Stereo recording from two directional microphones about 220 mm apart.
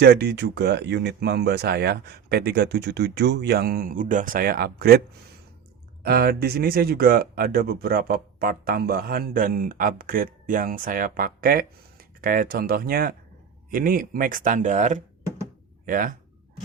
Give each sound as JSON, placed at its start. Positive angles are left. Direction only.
{"t": 0.0, "sound": "speech", "side_deg": -50}
{"t": 6.0, "sound": "speech", "side_deg": -45}